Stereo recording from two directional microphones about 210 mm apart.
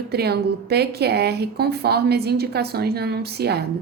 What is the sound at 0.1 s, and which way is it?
A woman's voice, 50° right (ahead or behind).